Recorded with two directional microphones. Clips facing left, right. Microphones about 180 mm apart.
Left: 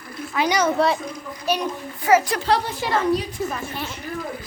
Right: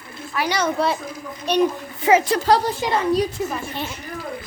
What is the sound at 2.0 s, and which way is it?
Speech, 20° right (ahead or behind).